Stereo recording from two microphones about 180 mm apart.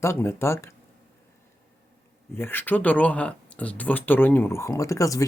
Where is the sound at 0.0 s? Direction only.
15° left (ahead or behind).